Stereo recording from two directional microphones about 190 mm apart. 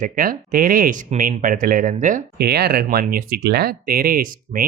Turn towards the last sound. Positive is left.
turn(degrees=-50)  # may be behind; listen again after turning